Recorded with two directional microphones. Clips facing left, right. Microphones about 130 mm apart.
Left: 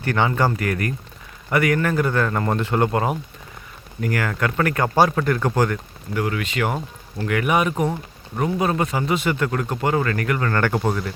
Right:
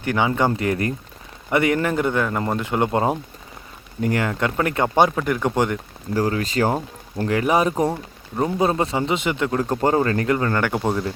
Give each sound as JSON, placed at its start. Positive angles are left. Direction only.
{"t": 0.0, "sound": "a man's voice", "side_deg": -15}
{"t": 2.9, "sound": "a man's voice", "side_deg": -25}
{"t": 6.1, "sound": "a man's voice", "side_deg": -35}
{"t": 9.6, "sound": "a man's voice", "side_deg": -30}
{"t": 10.5, "sound": "a man's voice", "side_deg": -10}